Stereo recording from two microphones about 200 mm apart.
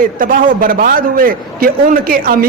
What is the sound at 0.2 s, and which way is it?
A man's voice, 45° right (ahead or behind).